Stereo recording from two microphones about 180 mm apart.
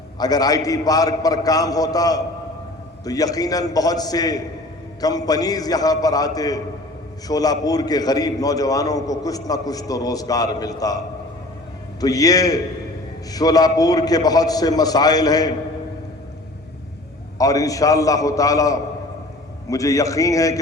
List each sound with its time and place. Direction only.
0.2 s a man's voice: 20° left (ahead or behind)
17.3 s a man's voice: 20° left (ahead or behind)